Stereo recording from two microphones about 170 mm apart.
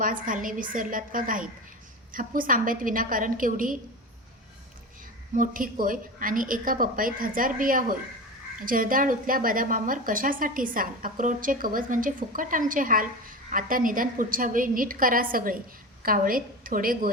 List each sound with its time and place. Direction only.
0.0 s a woman's voice: 50° right (ahead or behind)
5.3 s a woman's voice: 55° right (ahead or behind)